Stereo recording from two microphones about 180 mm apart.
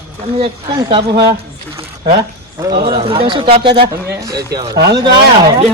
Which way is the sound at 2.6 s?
25° right (ahead or behind).